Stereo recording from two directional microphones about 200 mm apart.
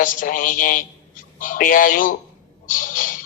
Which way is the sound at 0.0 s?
45° left (ahead or behind).